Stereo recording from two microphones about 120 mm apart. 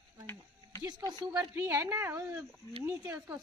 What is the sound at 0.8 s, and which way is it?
Speech, 30° right (ahead or behind).